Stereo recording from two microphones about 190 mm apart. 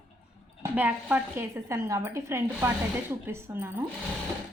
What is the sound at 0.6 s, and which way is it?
A woman's voice, 10° right (ahead or behind).